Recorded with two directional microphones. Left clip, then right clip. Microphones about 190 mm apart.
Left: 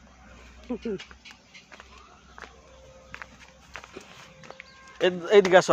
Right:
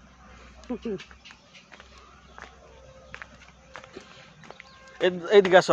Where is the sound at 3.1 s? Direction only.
20° left (ahead or behind).